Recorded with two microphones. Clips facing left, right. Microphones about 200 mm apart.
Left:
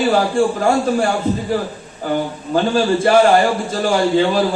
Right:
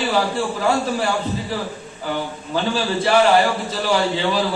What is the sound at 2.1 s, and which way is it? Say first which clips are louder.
A man's voice: left 6 dB; 45° left (ahead or behind).